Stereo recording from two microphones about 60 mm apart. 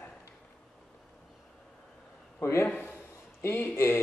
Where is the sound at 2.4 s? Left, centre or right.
Left.